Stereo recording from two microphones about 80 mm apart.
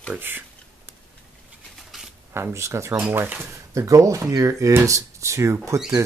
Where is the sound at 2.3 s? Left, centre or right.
Right.